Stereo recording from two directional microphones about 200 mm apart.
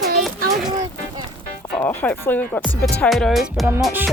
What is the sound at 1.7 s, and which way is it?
Speech, 10° left (ahead or behind).